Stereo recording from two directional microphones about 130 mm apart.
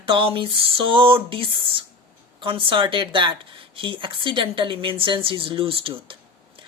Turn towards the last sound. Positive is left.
turn(degrees=-40)  # may be behind; listen again after turning